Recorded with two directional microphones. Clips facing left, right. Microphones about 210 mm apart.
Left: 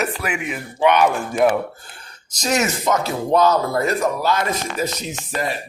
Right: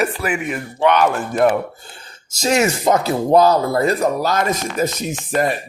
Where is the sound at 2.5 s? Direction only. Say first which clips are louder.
Right 4 dB; 30° right (ahead or behind).